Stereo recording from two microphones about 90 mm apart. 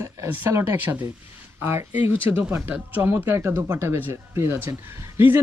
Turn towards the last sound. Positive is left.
turn(degrees=-25)  # may be behind; listen again after turning